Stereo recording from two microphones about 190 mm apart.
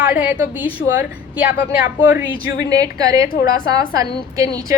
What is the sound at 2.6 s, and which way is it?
A woman's voice, 20° right (ahead or behind).